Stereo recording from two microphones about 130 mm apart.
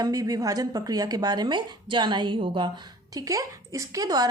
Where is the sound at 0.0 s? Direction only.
30° right (ahead or behind).